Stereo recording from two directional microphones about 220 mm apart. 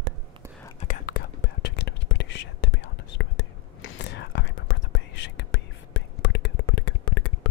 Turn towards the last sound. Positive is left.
turn(degrees=85)